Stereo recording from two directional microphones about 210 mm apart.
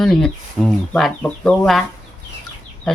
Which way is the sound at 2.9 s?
Centre (ahead or behind).